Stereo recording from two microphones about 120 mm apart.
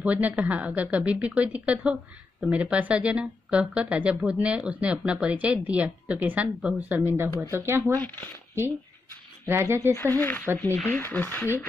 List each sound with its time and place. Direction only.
0.0 s speech: 10° right (ahead or behind)
7.9 s speech: 15° left (ahead or behind)
9.5 s speech: 20° right (ahead or behind)
9.9 s speech: 15° left (ahead or behind)